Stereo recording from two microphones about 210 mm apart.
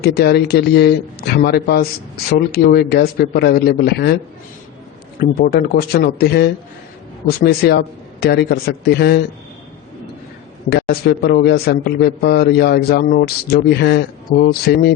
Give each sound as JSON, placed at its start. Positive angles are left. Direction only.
{"t": 0.0, "sound": "a man's voice", "side_deg": 50}
{"t": 5.2, "sound": "a man's voice", "side_deg": 50}
{"t": 10.7, "sound": "a man's voice", "side_deg": 50}